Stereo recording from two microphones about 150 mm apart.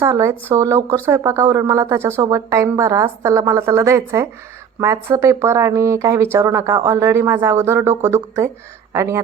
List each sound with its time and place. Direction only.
0.0 s a woman's voice: 20° right (ahead or behind)